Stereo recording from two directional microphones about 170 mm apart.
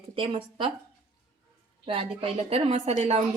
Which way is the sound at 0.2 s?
30° right (ahead or behind).